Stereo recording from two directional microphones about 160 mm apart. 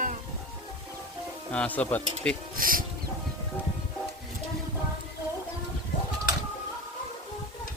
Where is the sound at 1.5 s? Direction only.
10° left (ahead or behind).